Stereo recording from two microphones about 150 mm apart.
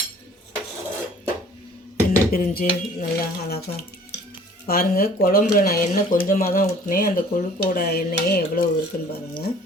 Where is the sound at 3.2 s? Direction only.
90° left.